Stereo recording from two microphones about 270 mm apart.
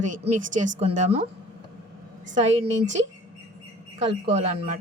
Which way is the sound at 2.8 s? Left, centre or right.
Right.